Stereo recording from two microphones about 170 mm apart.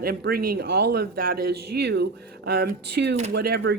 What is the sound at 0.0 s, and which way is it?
Speech, 65° right (ahead or behind).